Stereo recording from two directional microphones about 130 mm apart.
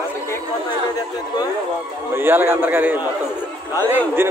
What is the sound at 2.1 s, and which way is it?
Speech, 15° right (ahead or behind).